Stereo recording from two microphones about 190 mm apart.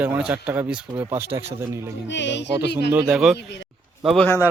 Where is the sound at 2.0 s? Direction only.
70° left (ahead or behind).